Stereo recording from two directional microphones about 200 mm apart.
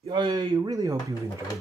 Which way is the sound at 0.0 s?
25° right (ahead or behind).